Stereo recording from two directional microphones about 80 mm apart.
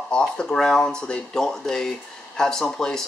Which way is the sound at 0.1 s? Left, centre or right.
Centre.